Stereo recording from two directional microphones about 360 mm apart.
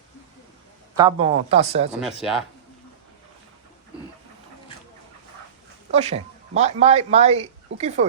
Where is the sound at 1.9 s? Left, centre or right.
Centre.